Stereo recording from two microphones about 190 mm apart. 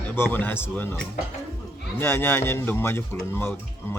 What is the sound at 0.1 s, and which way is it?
Speech, 10° left (ahead or behind).